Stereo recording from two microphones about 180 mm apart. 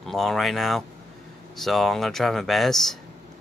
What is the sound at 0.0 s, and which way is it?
Speech, centre (ahead or behind).